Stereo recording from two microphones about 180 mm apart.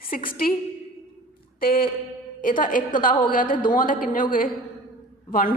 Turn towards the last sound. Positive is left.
turn(degrees=50)  # may be behind; listen again after turning